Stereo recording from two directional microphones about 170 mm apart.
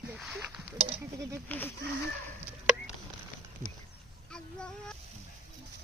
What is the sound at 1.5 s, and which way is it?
Speech, 10° left (ahead or behind).